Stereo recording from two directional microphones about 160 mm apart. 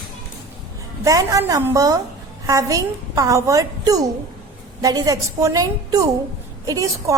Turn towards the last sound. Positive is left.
turn(degrees=-20)  # may be behind; listen again after turning